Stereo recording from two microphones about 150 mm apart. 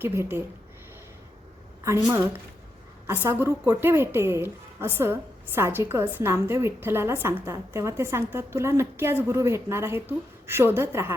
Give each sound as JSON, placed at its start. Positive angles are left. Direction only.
{"t": 0.0, "sound": "a woman's voice", "side_deg": -15}
{"t": 2.0, "sound": "a woman's voice", "side_deg": -15}